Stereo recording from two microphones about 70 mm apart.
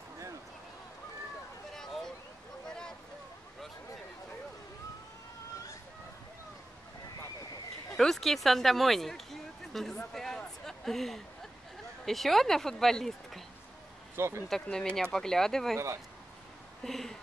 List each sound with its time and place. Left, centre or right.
1.7 s a sound: centre
7.9 s speech: centre
14.1 s speech: right
14.5 s speech: centre
16.8 s speech: centre